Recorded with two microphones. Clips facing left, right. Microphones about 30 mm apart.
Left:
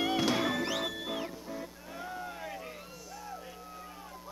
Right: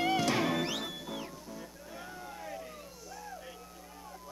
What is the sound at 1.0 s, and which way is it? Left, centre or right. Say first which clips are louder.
Music: left 4 dB; left.